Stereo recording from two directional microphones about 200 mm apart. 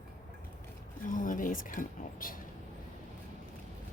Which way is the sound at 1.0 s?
40° left (ahead or behind).